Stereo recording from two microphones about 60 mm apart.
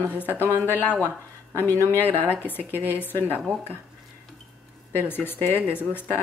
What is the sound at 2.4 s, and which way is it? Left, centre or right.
Speech, left.